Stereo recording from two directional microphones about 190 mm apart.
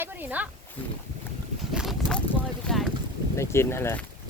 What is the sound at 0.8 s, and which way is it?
Speech, 10° left (ahead or behind).